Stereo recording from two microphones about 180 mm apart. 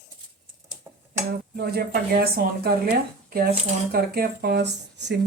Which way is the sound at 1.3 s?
60° right (ahead or behind).